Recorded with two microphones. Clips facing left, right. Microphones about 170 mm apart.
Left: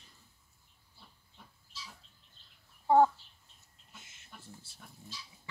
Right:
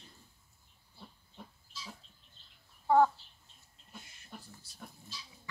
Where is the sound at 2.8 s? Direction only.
20° left (ahead or behind).